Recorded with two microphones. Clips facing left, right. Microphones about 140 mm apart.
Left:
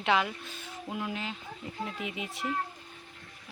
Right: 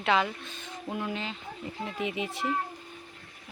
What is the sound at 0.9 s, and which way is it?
Speech, 5° left (ahead or behind).